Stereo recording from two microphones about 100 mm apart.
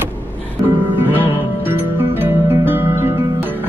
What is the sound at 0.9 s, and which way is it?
Music, 20° right (ahead or behind).